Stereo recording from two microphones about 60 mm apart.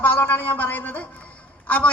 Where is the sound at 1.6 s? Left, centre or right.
Left.